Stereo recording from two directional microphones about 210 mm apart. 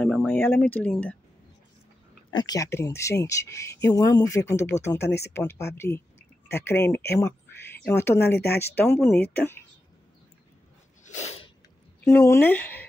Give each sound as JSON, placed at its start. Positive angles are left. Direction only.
{"t": 0.0, "sound": "speech", "side_deg": 5}
{"t": 2.3, "sound": "speech", "side_deg": 20}
{"t": 7.8, "sound": "speech", "side_deg": 10}
{"t": 11.1, "sound": "sneeze", "side_deg": 30}
{"t": 12.0, "sound": "speech", "side_deg": 10}